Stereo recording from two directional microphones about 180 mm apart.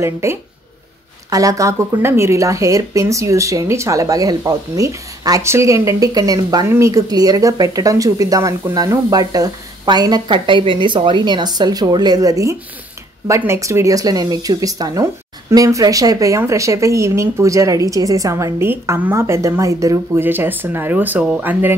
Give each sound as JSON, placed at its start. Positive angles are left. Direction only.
{"t": 0.0, "sound": "speech", "side_deg": -15}